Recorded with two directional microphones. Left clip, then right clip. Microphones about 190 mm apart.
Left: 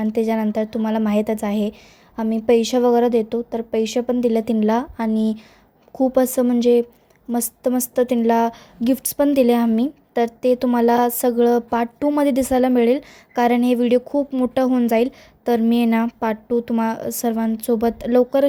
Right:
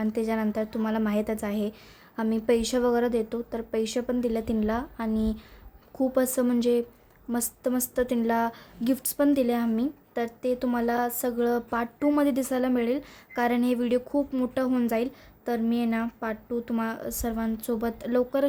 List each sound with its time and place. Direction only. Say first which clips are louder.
0.0 s a woman's voice: left 7 dB; 20° left (ahead or behind)